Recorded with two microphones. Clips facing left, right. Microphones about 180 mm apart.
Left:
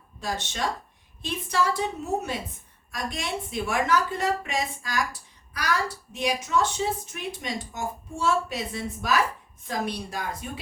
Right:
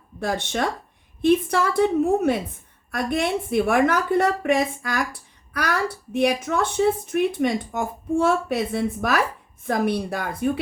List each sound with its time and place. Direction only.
0.2 s speech: 60° right (ahead or behind)